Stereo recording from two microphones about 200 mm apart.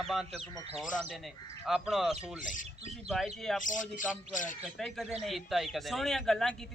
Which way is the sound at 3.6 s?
40° left (ahead or behind).